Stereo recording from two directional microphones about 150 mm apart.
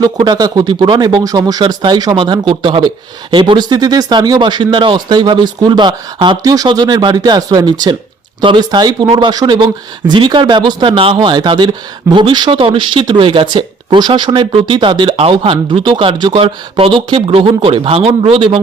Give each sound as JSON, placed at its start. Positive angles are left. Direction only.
{"t": 0.0, "sound": "speech", "side_deg": -25}